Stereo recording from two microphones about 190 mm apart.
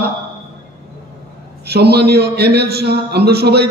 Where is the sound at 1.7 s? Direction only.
60° right (ahead or behind).